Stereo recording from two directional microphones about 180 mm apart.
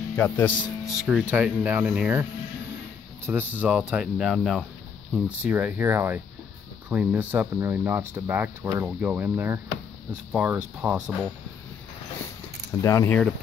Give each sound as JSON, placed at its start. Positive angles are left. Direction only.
{"t": 0.1, "sound": "speech", "side_deg": 10}
{"t": 1.3, "sound": "speech", "side_deg": -10}
{"t": 3.3, "sound": "speech", "side_deg": -10}
{"t": 12.8, "sound": "speech", "side_deg": 15}